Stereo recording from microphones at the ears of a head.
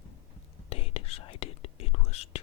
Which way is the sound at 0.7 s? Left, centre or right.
Left.